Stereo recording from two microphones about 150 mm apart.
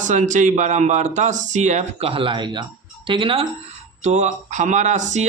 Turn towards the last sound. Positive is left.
turn(degrees=-50)  # may be behind; listen again after turning